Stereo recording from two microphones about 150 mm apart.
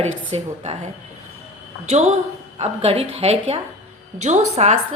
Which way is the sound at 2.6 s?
45° right (ahead or behind).